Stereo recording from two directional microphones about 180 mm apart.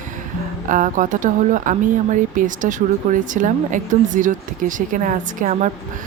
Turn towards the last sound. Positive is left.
turn(degrees=-45)  # may be behind; listen again after turning